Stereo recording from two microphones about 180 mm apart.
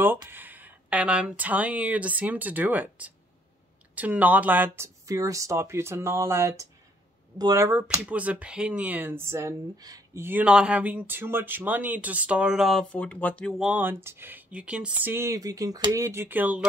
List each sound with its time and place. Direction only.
0.0 s speech: 10° right (ahead or behind); by 13.7 s 5° left (ahead or behind)
13.7 s speech: 10° right (ahead or behind)